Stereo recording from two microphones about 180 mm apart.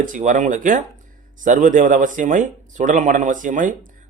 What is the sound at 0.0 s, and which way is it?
Speech, 45° right (ahead or behind).